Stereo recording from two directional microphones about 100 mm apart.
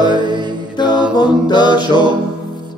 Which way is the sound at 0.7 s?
50° left (ahead or behind).